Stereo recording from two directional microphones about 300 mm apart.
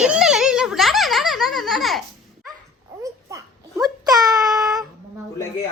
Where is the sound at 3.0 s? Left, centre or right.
Centre.